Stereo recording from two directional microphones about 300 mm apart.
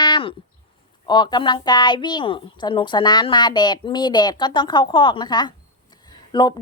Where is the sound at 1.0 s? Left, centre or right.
Centre.